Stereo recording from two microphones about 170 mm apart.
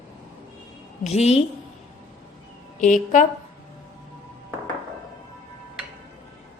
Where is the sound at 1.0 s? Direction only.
40° left (ahead or behind).